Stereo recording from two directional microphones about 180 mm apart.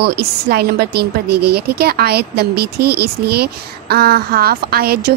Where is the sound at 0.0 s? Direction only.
65° right (ahead or behind).